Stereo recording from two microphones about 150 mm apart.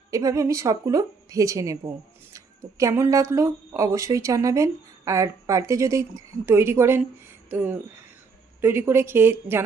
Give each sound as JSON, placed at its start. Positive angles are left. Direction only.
{"t": 0.1, "sound": "a woman's voice", "side_deg": -20}